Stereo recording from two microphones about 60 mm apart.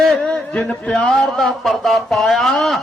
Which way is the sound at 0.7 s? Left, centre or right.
Centre.